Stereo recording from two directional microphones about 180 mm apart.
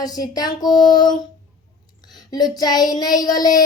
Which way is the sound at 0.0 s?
20° left (ahead or behind).